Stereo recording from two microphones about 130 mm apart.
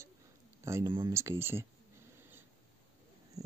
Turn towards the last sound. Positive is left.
turn(degrees=-25)  # may be behind; listen again after turning